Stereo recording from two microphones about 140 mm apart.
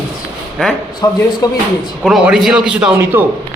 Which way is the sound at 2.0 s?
Centre (ahead or behind).